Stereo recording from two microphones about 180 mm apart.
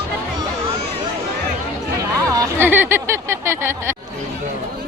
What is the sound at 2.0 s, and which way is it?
Speech, 20° right (ahead or behind).